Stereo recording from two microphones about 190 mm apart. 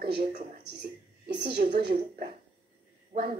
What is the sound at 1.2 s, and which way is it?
Speech, 65° right (ahead or behind).